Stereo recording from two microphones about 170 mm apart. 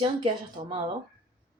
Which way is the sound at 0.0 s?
30° right (ahead or behind).